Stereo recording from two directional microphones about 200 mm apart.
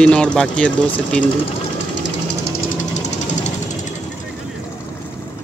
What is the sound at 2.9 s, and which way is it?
Sewing machine, 35° left (ahead or behind).